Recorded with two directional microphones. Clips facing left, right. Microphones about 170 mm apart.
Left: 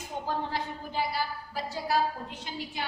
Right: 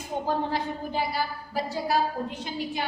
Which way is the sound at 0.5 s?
15° right (ahead or behind).